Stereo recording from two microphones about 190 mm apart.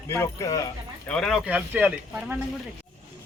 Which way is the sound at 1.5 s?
10° right (ahead or behind).